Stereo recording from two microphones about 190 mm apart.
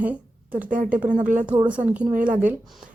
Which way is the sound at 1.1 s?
45° right (ahead or behind).